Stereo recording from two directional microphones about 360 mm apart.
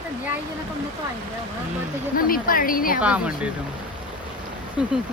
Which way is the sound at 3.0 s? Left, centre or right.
Centre.